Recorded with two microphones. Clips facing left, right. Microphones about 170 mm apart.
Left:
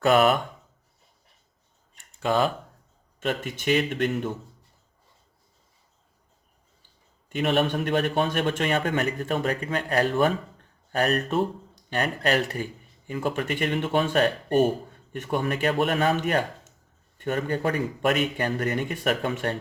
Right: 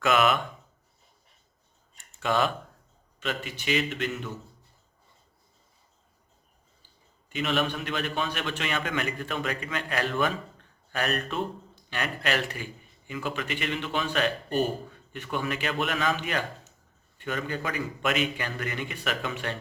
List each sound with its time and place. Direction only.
0.0 s speech: 35° left (ahead or behind)
2.2 s speech: 35° left (ahead or behind)
3.2 s a man's voice: 50° left (ahead or behind)
7.3 s a man's voice: 50° left (ahead or behind)